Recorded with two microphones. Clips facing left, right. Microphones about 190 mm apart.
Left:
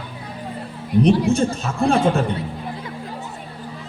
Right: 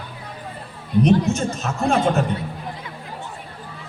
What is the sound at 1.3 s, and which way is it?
Speech, 30° left (ahead or behind).